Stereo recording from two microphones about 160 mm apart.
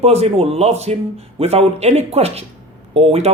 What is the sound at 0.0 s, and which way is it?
A man's voice, 40° right (ahead or behind).